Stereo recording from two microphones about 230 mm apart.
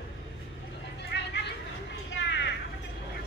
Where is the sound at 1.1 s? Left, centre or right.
Left.